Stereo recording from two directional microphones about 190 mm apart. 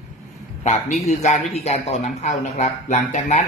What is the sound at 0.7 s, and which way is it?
Speech, 35° left (ahead or behind).